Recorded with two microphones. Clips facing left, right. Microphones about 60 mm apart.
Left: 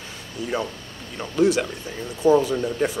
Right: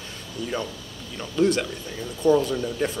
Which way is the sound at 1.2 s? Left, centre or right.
Centre.